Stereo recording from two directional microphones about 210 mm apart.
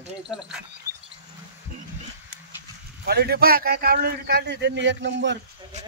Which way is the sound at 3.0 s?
50° right (ahead or behind).